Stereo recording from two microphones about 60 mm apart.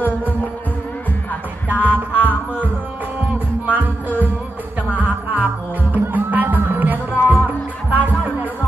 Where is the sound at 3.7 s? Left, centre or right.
Right.